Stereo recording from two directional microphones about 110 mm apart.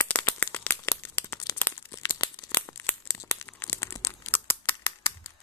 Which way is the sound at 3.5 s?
20° left (ahead or behind).